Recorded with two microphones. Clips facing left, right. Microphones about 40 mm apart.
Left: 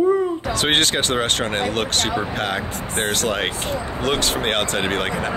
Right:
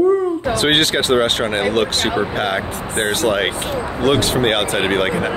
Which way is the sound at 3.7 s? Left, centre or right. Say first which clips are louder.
Right 3 dB; right.